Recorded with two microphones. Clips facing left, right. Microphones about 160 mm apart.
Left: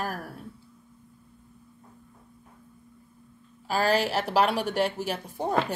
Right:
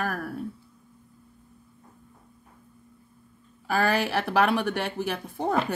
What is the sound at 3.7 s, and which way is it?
Speech, 55° right (ahead or behind).